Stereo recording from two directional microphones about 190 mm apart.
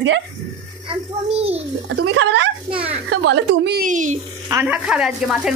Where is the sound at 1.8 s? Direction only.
80° right.